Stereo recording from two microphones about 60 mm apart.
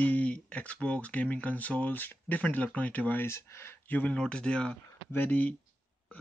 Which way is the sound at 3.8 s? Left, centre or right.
Left.